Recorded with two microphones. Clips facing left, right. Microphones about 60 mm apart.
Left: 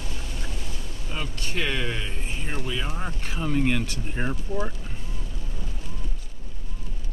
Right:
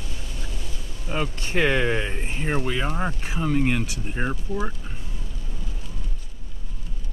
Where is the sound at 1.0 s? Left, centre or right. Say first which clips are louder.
Right 6 dB; right.